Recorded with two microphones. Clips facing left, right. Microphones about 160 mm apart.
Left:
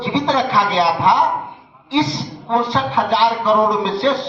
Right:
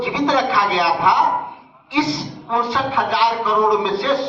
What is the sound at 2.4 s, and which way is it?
A man's voice, 25° left (ahead or behind).